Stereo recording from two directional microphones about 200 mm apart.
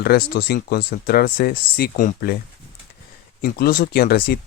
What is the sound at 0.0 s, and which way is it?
Speech, 50° left (ahead or behind).